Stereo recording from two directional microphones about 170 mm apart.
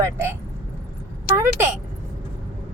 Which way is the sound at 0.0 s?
15° right (ahead or behind).